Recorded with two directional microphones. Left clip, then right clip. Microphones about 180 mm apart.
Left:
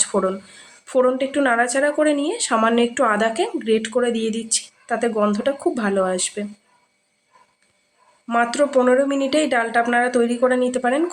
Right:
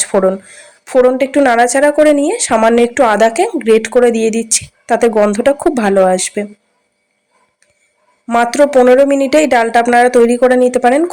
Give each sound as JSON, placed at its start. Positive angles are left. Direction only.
{"t": 0.0, "sound": "a woman's voice", "side_deg": -35}
{"t": 8.3, "sound": "a woman's voice", "side_deg": -40}